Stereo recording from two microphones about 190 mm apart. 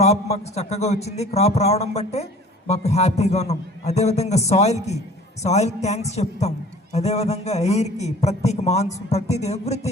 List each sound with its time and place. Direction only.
0.0 s a man's voice: 35° left (ahead or behind)